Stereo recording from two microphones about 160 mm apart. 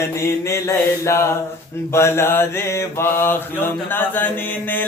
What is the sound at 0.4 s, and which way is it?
Mantra, 15° left (ahead or behind).